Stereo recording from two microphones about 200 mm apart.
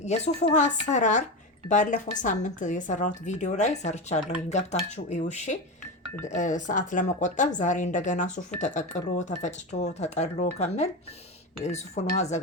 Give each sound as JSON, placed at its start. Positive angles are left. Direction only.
{"t": 0.0, "sound": "speech", "side_deg": 35}